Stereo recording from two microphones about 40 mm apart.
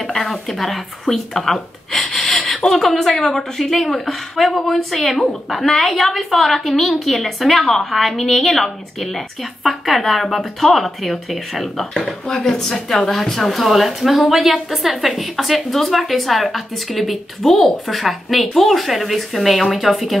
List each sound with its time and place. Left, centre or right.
0.0 s a woman's voice: centre